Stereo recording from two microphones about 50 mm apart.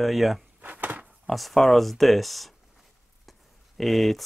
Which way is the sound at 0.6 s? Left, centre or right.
Right.